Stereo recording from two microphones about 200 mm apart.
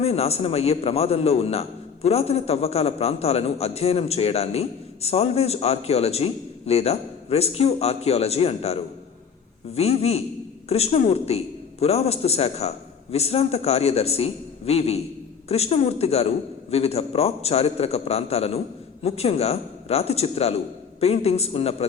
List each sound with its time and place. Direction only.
0.0 s a man's voice: 30° left (ahead or behind)